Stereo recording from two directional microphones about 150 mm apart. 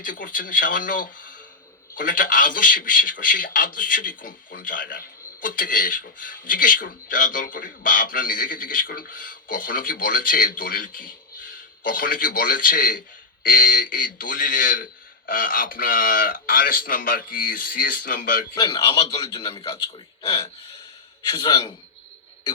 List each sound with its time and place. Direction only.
0.0 s a man's voice: 65° left (ahead or behind)
18.5 s speech: 30° left (ahead or behind)